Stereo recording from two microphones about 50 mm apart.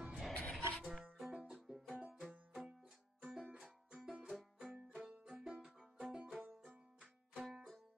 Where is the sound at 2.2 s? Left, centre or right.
Centre.